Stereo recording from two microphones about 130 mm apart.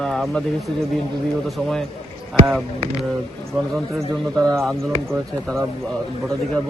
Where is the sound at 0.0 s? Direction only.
5° left (ahead or behind).